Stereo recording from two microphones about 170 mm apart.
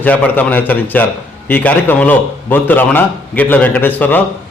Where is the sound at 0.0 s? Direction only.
10° left (ahead or behind).